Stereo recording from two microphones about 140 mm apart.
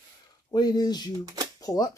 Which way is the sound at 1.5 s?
25° left (ahead or behind).